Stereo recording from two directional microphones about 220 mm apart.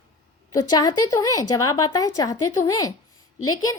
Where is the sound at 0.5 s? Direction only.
20° left (ahead or behind).